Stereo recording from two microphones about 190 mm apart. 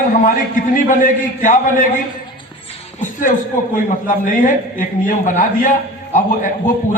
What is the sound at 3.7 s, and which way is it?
A man's voice, 45° left (ahead or behind).